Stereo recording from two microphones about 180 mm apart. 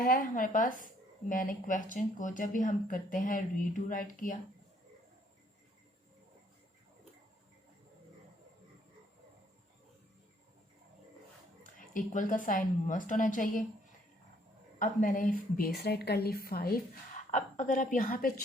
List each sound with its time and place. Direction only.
0.0 s speech: 50° left (ahead or behind)
11.6 s speech: 50° left (ahead or behind)
14.8 s a woman's voice: 45° left (ahead or behind)
17.3 s speech: 45° left (ahead or behind)